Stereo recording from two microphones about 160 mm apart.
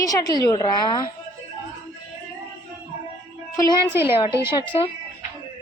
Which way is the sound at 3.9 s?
15° right (ahead or behind).